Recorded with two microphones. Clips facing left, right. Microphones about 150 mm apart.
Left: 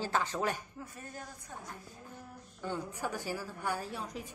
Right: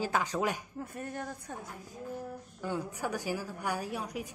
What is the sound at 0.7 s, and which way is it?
Speech, 60° right (ahead or behind).